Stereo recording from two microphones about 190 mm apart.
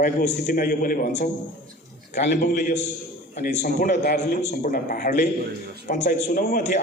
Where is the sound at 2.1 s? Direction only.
40° left (ahead or behind).